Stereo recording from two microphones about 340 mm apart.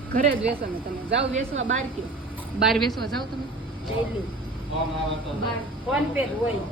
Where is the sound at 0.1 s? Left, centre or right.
Right.